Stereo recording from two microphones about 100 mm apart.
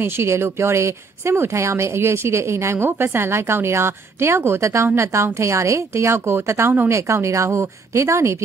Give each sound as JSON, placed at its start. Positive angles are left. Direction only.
{"t": 0.0, "sound": "speech", "side_deg": -25}